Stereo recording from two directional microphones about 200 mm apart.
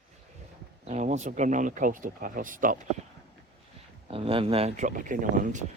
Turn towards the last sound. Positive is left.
turn(degrees=-40)  # may be behind; listen again after turning